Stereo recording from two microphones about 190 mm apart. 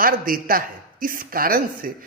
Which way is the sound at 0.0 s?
50° right (ahead or behind).